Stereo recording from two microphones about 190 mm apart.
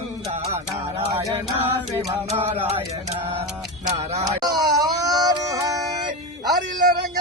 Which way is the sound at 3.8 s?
35° right (ahead or behind).